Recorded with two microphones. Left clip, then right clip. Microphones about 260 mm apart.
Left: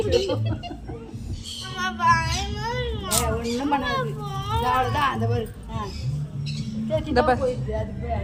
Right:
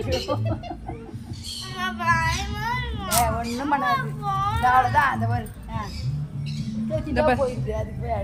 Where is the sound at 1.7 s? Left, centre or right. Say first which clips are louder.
Left 2 dB; centre.